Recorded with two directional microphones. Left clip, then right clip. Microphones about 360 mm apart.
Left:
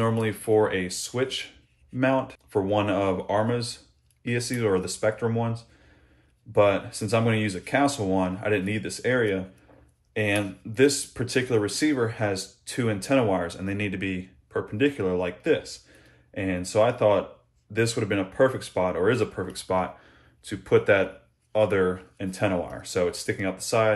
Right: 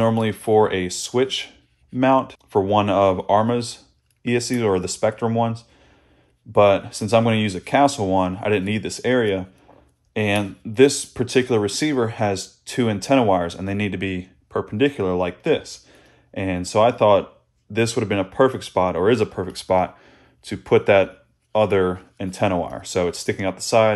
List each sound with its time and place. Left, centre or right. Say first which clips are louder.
0.0 s speech: right 6 dB; centre